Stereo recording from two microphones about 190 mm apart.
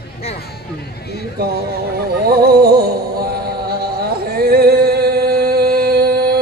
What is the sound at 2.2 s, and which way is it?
Music, 55° right (ahead or behind).